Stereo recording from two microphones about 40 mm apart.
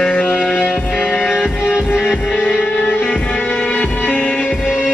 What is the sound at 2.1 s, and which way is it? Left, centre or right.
Music, left.